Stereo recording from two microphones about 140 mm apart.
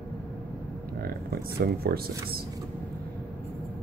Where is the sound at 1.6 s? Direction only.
90° right.